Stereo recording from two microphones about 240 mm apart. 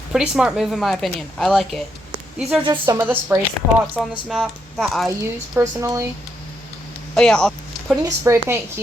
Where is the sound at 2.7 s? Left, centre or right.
Centre.